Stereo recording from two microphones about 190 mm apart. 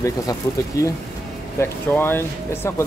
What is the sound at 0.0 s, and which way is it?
Speech, 15° left (ahead or behind).